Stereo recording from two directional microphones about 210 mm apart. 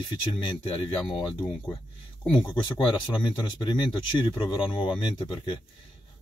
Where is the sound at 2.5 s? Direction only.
20° left (ahead or behind).